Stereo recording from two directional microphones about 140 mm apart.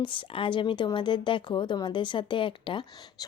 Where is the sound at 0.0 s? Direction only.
35° left (ahead or behind).